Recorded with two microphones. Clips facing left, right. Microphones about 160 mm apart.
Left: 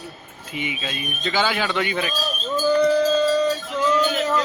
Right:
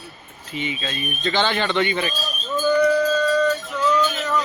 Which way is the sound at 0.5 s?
15° left (ahead or behind).